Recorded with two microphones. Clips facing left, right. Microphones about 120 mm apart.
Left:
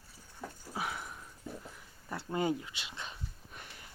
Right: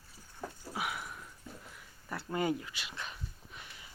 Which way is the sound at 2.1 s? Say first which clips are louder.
Even; 25° left (ahead or behind).